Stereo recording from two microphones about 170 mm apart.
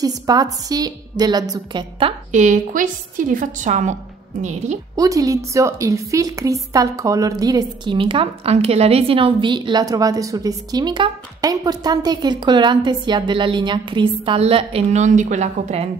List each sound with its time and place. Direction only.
0.0 s a woman's voice: 20° right (ahead or behind)
2.3 s a woman's voice: 45° right (ahead or behind)
4.9 s a woman's voice: 20° right (ahead or behind); by 15.9 s 40° right (ahead or behind)